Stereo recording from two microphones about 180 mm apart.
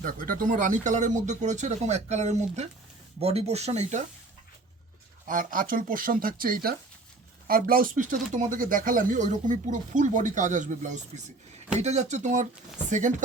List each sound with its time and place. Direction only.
0.0 s speech: 50° right (ahead or behind)
5.3 s speech: 50° right (ahead or behind)